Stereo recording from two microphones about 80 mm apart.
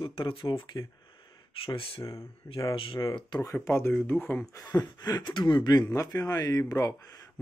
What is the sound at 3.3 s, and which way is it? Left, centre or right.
Speech, left.